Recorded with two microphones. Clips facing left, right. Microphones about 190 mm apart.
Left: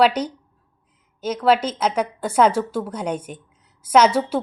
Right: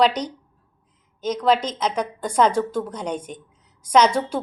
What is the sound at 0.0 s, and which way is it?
A woman's voice, 5° left (ahead or behind).